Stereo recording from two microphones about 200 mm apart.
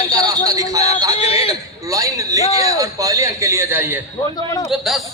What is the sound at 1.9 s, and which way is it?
Speech, 15° right (ahead or behind).